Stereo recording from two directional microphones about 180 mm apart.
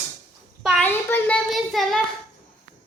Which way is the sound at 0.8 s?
10° left (ahead or behind).